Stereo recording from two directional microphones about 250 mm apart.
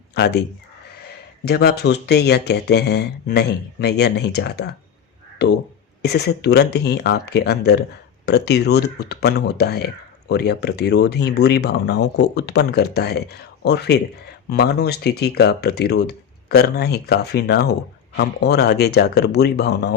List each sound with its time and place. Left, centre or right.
0.1 s speech: left
1.5 s speech: left
6.0 s speech: left